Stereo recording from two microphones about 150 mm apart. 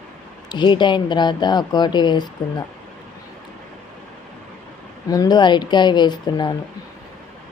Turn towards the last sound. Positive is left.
turn(degrees=30)  # may be behind; listen again after turning